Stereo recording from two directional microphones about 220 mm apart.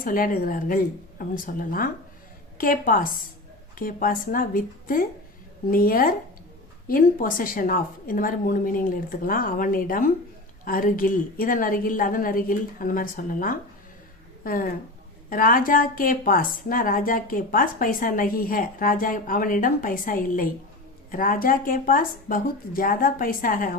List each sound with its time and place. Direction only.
0.0 s a woman's voice: 40° left (ahead or behind)